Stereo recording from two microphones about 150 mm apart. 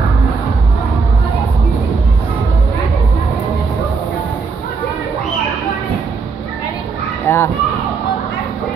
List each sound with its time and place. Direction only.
7.2 s children playing: 15° left (ahead or behind)